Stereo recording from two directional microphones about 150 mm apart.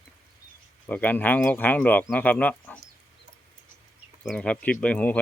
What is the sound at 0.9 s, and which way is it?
Speech, 10° left (ahead or behind).